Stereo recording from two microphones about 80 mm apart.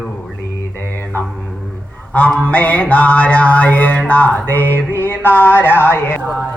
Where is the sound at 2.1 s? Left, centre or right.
Centre.